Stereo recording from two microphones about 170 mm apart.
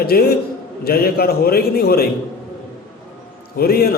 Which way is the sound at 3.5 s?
65° left (ahead or behind).